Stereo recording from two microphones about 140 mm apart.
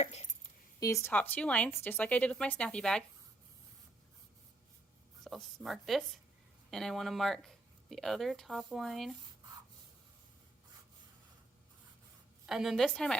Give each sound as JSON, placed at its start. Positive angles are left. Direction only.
{"t": 0.0, "sound": "speech", "side_deg": 55}
{"t": 0.8, "sound": "a woman's voice", "side_deg": 20}
{"t": 1.1, "sound": "speech", "side_deg": 10}
{"t": 5.2, "sound": "speech", "side_deg": 0}
{"t": 12.5, "sound": "speech", "side_deg": 0}